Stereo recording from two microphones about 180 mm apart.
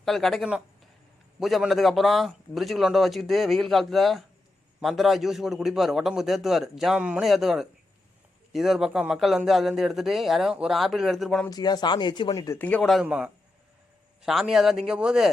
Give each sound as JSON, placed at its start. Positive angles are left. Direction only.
{"t": 0.0, "sound": "a man's voice", "side_deg": 0}
{"t": 11.4, "sound": "speech", "side_deg": 20}
{"t": 12.5, "sound": "a man's voice", "side_deg": 10}